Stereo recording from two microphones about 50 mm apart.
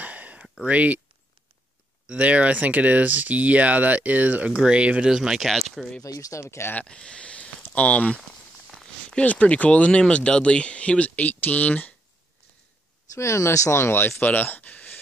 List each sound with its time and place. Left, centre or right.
0.0 s a sound: right
0.7 s speech: right
2.0 s speech: right
5.1 s speech: centre
5.5 s speech: centre
6.1 s speech: left
6.8 s speech: centre
13.1 s speech: left
13.8 s speech: left
14.2 s speech: left